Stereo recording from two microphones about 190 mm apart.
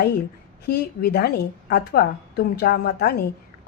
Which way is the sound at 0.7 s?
55° left (ahead or behind).